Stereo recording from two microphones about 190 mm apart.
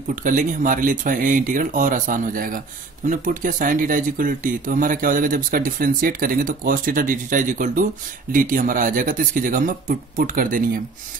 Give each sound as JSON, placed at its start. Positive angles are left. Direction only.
{"t": 0.1, "sound": "speech", "side_deg": -45}